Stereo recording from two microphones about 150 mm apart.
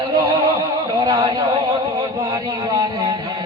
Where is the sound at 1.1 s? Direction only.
35° right (ahead or behind).